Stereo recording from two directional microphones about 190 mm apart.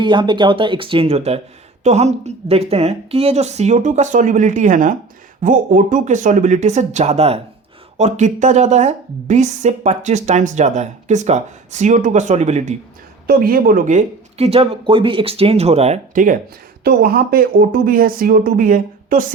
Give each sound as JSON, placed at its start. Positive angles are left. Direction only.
{"t": 0.0, "sound": "a woman's voice", "side_deg": -25}
{"t": 13.2, "sound": "a woman's voice", "side_deg": -50}